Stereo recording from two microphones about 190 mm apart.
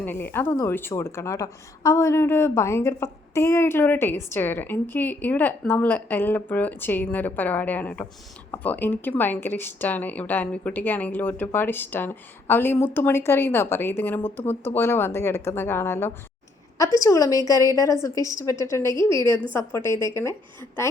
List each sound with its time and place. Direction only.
0.0 s a woman's voice: 10° left (ahead or behind)